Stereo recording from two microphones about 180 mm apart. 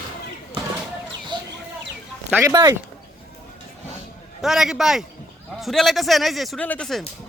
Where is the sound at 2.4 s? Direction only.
20° right (ahead or behind).